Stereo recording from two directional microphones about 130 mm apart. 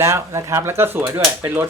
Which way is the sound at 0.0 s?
20° right (ahead or behind).